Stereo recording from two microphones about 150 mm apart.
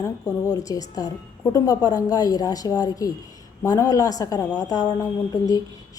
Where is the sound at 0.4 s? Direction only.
25° left (ahead or behind).